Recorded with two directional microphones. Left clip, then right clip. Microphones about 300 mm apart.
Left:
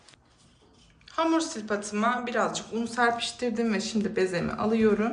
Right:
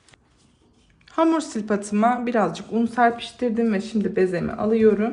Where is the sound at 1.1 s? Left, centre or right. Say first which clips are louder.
Right 5 dB; centre.